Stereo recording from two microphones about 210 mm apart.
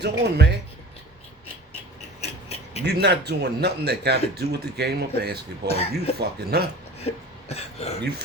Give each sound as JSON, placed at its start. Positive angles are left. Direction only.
{"t": 0.0, "sound": "speech", "side_deg": -55}
{"t": 2.2, "sound": "tick-tock", "side_deg": 30}
{"t": 2.8, "sound": "speech", "side_deg": -50}
{"t": 5.6, "sound": "speech", "side_deg": 30}
{"t": 6.1, "sound": "speech", "side_deg": -50}
{"t": 7.0, "sound": "speech", "side_deg": 30}